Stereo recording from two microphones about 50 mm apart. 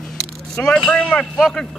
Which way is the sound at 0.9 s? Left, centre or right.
Left.